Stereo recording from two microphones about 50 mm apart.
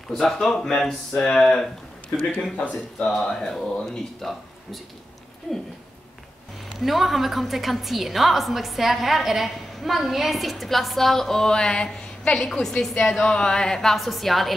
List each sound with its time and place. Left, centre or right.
0.1 s a woman's voice: centre
2.5 s speech: left
3.1 s a woman's voice: centre
3.3 s a woman's voice: centre
6.8 s a woman's voice: centre